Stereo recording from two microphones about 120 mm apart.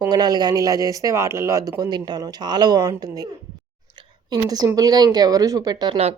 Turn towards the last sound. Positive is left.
turn(degrees=-60)  # may be behind; listen again after turning